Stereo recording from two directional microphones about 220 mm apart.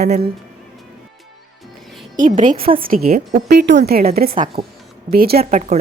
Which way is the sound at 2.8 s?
40° right (ahead or behind).